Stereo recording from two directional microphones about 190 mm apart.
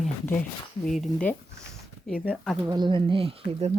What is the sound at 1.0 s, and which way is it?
Speech, 5° left (ahead or behind).